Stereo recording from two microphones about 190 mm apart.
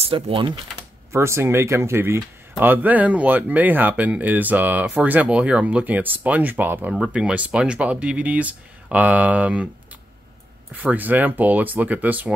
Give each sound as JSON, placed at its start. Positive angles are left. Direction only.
{"t": 0.0, "sound": "speech", "side_deg": -25}
{"t": 1.1, "sound": "speech", "side_deg": -15}
{"t": 10.7, "sound": "speech", "side_deg": -10}